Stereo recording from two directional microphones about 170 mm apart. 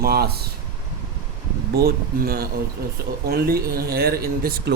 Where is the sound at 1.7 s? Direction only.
65° right (ahead or behind).